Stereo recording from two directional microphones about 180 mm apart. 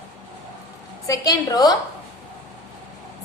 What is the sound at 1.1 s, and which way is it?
Speech, 20° left (ahead or behind).